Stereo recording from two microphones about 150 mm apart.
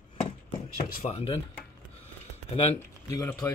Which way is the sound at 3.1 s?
20° left (ahead or behind).